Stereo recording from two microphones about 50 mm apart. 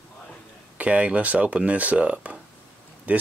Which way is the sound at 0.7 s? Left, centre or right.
Right.